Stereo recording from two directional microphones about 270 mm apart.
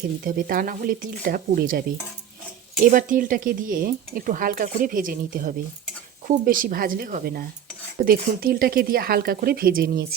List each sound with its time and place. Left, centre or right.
0.3 s speech: right
2.8 s speech: right